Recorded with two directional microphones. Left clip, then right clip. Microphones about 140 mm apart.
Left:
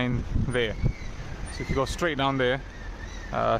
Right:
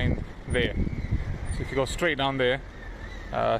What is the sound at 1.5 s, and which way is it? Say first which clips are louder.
Speech: even; 20° left (ahead or behind).